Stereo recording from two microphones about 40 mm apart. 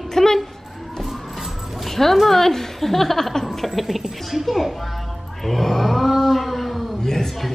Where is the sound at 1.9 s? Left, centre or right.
Centre.